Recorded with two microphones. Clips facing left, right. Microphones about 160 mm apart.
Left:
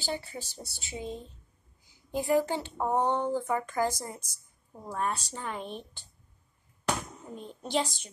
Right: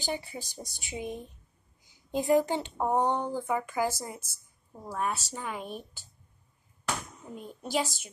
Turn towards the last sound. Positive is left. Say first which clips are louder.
# even
turn(degrees=-5)  # may be behind; listen again after turning